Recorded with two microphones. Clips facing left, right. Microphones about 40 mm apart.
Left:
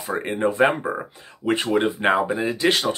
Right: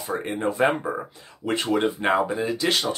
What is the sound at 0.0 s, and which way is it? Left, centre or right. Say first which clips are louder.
Speech: left 3 dB; left.